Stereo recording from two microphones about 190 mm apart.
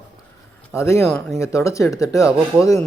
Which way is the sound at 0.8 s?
15° left (ahead or behind).